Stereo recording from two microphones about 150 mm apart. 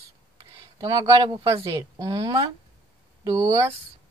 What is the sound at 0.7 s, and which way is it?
Speech, 25° right (ahead or behind).